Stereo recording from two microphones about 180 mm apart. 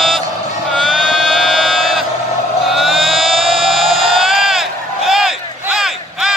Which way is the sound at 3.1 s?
30° right (ahead or behind).